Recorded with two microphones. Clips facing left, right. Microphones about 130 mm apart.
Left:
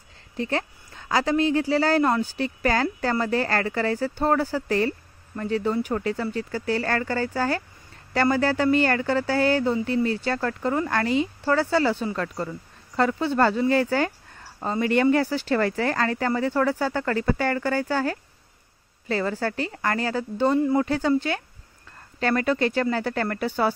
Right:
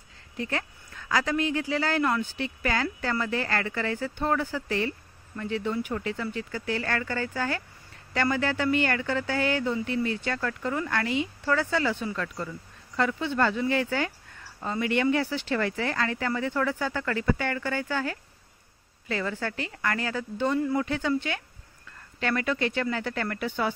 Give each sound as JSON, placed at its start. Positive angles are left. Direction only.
{"t": 0.4, "sound": "a woman's voice", "side_deg": 30}